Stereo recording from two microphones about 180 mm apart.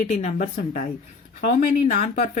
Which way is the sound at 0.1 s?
35° left (ahead or behind).